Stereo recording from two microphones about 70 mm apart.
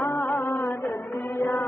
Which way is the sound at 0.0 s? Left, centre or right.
Left.